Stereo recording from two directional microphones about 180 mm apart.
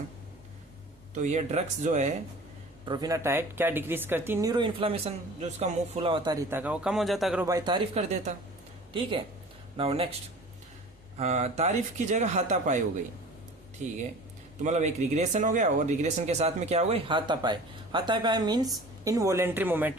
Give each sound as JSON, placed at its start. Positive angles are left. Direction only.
{"t": 1.1, "sound": "speech", "side_deg": -40}
{"t": 2.8, "sound": "speech", "side_deg": -25}
{"t": 6.3, "sound": "speech", "side_deg": -10}
{"t": 7.4, "sound": "speech", "side_deg": -20}
{"t": 8.9, "sound": "speech", "side_deg": -30}
{"t": 11.2, "sound": "speech", "side_deg": -35}
{"t": 13.8, "sound": "speech", "side_deg": -40}